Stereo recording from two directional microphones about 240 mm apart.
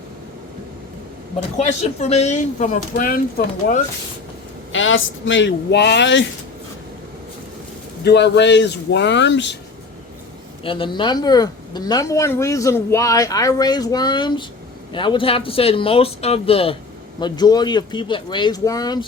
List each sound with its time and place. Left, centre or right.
1.5 s speech: left
4.7 s a woman's voice: left
8.0 s a woman's voice: left
10.6 s speech: left